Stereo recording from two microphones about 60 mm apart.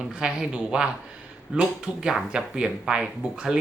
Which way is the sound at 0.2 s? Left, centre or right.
Centre.